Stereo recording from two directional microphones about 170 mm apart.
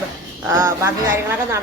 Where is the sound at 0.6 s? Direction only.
15° right (ahead or behind).